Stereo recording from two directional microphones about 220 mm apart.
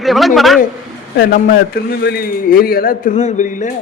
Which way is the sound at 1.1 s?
45° left (ahead or behind).